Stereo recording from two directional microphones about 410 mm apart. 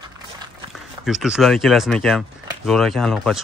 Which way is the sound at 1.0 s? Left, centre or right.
Centre.